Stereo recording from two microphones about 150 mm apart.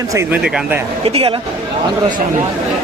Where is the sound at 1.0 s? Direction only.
40° right (ahead or behind).